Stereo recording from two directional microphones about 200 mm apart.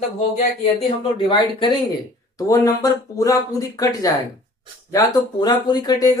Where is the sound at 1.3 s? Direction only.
25° left (ahead or behind).